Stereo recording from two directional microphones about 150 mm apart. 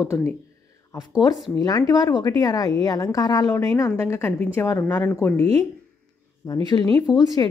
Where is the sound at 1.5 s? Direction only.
25° left (ahead or behind).